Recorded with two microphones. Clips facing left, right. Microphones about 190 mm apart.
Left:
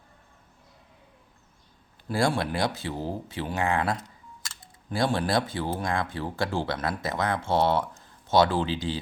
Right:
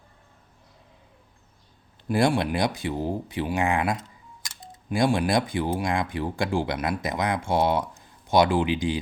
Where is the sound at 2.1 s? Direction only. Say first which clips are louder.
Right 3 dB; 20° right (ahead or behind).